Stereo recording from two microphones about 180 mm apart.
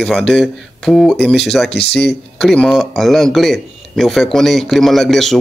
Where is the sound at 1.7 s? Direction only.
65° left (ahead or behind).